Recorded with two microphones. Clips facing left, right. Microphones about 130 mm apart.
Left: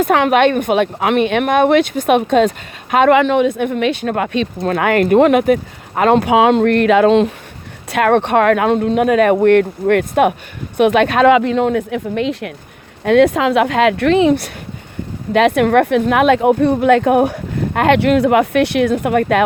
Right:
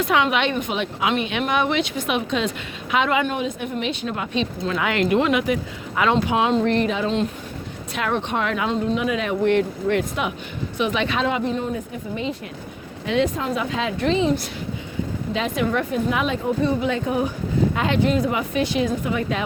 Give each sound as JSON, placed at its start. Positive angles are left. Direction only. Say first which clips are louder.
{"t": 0.0, "sound": "speech", "louder": "left 8 dB", "side_deg": 55}
{"t": 7.9, "sound": "speech", "louder": "left 11 dB", "side_deg": 60}
{"t": 11.3, "sound": "speech", "louder": "left 11 dB", "side_deg": 90}